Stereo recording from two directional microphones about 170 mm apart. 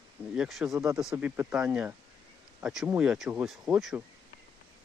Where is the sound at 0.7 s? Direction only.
20° right (ahead or behind).